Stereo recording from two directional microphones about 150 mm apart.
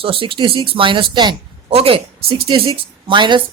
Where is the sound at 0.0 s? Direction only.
35° right (ahead or behind).